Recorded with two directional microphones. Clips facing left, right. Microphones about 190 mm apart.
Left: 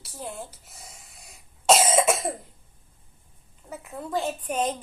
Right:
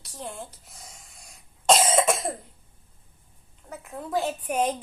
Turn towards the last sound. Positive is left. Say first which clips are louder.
# right 1 dB
turn(degrees=-10)  # may be behind; listen again after turning